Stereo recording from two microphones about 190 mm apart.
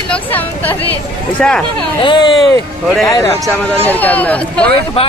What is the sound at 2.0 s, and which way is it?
Speech, 25° left (ahead or behind).